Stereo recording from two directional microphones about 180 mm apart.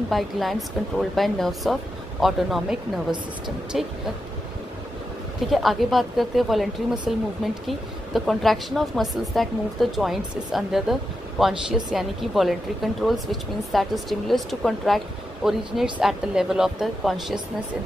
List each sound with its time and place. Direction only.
0.1 s a woman's voice: centre (ahead or behind)
5.5 s a woman's voice: centre (ahead or behind)